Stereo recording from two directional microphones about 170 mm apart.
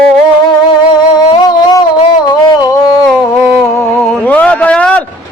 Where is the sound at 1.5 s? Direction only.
25° left (ahead or behind).